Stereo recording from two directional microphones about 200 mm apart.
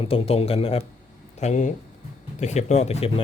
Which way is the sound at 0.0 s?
30° left (ahead or behind).